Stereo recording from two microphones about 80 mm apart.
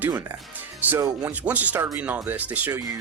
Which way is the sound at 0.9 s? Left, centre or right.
Right.